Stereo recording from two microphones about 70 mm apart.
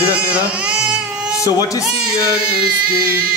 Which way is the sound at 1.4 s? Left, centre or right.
Left.